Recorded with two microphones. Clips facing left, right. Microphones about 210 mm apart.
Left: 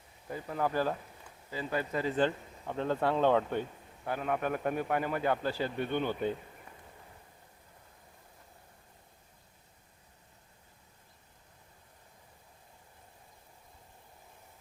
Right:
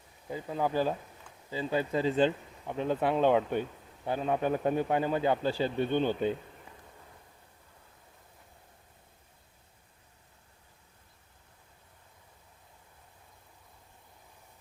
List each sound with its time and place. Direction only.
0.3 s speech: 15° right (ahead or behind)